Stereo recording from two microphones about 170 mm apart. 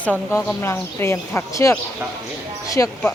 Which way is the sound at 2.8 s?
15° left (ahead or behind).